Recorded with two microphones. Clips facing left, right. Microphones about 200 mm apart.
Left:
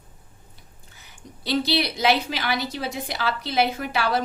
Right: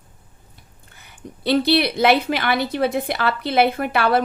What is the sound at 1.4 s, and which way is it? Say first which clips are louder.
A woman's voice: right 6 dB; 60° right (ahead or behind).